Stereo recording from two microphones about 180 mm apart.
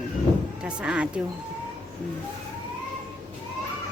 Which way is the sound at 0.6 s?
5° right (ahead or behind).